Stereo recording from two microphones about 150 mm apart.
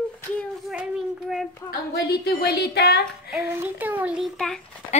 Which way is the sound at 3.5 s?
15° right (ahead or behind).